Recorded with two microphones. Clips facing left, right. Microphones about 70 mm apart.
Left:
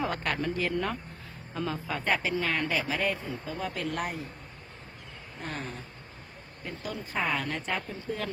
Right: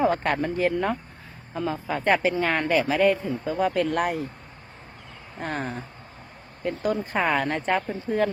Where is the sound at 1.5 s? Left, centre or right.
Centre.